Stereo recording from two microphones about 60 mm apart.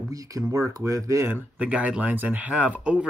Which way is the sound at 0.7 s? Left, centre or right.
Right.